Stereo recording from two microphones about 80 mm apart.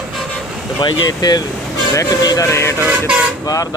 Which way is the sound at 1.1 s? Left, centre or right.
Left.